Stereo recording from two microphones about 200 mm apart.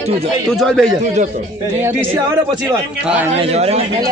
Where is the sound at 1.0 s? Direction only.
35° right (ahead or behind).